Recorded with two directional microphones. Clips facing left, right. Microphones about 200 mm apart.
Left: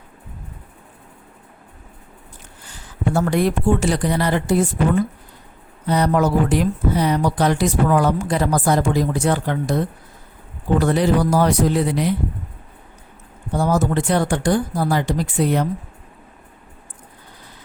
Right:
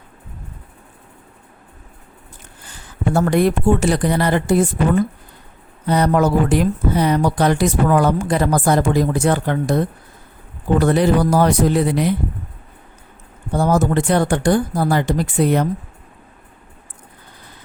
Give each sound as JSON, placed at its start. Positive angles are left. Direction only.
{"t": 3.1, "sound": "speech", "side_deg": -55}
{"t": 5.9, "sound": "speech", "side_deg": -55}
{"t": 13.6, "sound": "speech", "side_deg": -55}